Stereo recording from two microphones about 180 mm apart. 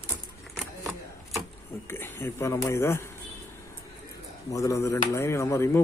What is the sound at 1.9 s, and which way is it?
Speech, 15° left (ahead or behind).